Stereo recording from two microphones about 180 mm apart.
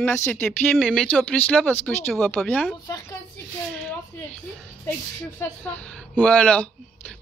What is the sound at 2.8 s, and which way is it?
Speech, 15° left (ahead or behind).